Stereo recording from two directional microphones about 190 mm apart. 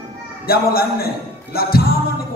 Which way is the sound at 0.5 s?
50° left (ahead or behind).